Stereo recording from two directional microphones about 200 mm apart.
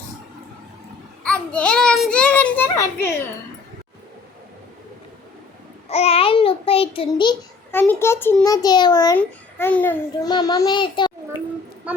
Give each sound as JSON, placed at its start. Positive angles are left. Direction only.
{"t": 1.2, "sound": "a sound", "side_deg": 5}
{"t": 5.9, "sound": "a child's voice", "side_deg": 30}
{"t": 7.7, "sound": "a child's voice", "side_deg": 10}
{"t": 9.1, "sound": "a child's voice", "side_deg": 10}
{"t": 10.2, "sound": "a child's voice", "side_deg": 20}